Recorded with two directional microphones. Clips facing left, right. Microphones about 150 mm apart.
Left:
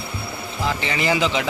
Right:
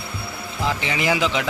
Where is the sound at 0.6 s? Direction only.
5° right (ahead or behind).